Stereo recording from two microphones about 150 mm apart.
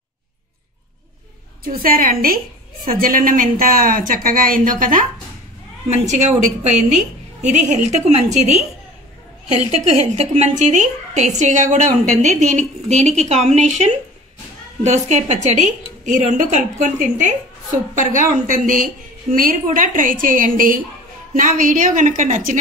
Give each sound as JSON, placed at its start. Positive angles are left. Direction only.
{"t": 1.6, "sound": "a woman's voice", "side_deg": -75}
{"t": 5.9, "sound": "a woman's voice", "side_deg": -50}